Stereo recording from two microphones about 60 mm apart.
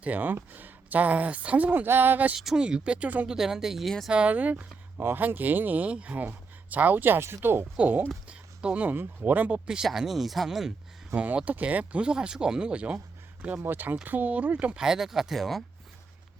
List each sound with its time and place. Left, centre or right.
0.0 s speech: right
2.3 s speech: centre; by 3.2 s right
3.2 s speech: centre
4.1 s speech: right
4.9 s speech: right
8.3 s speech: right
9.6 s speech: centre
11.1 s speech: right
13.7 s speech: right
14.8 s speech: centre